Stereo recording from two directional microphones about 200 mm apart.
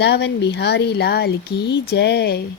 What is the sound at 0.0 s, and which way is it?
Speech, 55° left (ahead or behind).